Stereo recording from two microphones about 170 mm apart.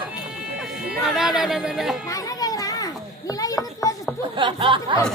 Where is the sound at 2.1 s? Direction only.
20° left (ahead or behind).